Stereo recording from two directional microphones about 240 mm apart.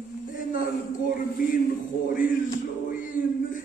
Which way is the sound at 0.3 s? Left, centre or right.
Left.